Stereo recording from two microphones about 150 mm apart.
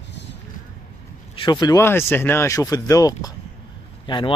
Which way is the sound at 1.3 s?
30° left (ahead or behind).